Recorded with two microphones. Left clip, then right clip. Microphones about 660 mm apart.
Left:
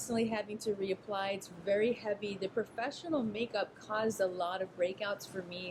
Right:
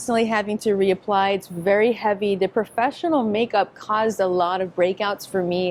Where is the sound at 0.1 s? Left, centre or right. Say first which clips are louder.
Right 15 dB; right.